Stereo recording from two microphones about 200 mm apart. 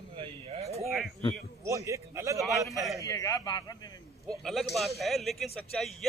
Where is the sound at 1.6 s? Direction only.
15° right (ahead or behind).